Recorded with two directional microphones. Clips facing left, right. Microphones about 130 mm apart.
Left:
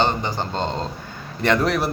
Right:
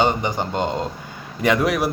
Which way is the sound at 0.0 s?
15° right (ahead or behind).